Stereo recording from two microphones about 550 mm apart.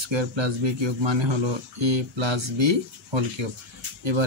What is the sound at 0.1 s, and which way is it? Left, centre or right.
Speech, right.